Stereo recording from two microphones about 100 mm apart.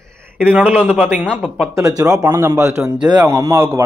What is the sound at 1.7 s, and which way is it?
Speech, 30° right (ahead or behind).